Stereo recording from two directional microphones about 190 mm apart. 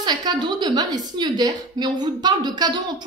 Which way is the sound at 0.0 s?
20° right (ahead or behind).